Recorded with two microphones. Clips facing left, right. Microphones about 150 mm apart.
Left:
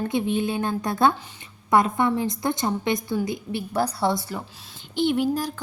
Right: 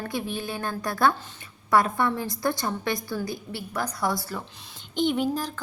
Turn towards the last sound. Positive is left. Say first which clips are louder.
# left 2 dB
turn(degrees=10)  # may be behind; listen again after turning